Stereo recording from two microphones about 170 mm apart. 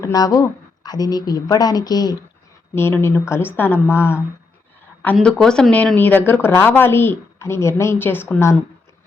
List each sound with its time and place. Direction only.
0.0 s a woman's voice: 20° left (ahead or behind)
5.1 s speech: 5° left (ahead or behind)